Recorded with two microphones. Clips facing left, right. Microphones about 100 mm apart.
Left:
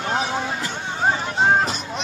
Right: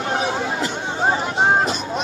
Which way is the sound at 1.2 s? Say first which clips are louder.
Right 1 dB; 30° right (ahead or behind).